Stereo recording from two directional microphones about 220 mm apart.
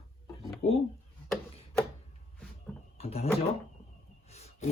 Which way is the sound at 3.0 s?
25° left (ahead or behind).